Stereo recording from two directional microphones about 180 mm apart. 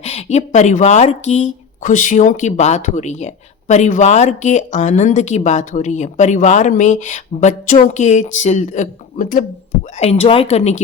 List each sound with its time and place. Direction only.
0.0 s speech: 40° left (ahead or behind)
10.0 s speech: 35° left (ahead or behind)